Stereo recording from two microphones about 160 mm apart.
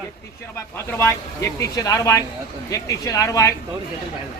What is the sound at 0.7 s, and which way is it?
A man's voice, 15° left (ahead or behind).